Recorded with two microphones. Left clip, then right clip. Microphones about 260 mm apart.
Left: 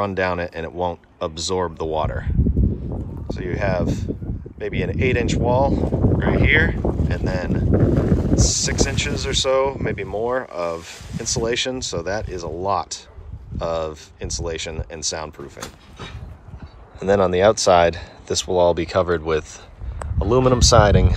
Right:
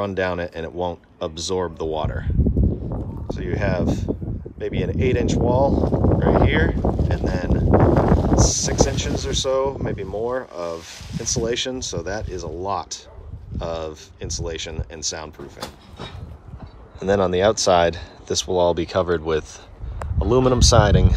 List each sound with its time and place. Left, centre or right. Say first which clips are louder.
0.0 s speech: left 2 dB; centre
3.3 s speech: left 2 dB; centre
17.0 s speech: left 2 dB; centre